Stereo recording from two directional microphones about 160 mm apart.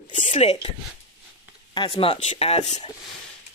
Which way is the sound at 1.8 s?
35° left (ahead or behind).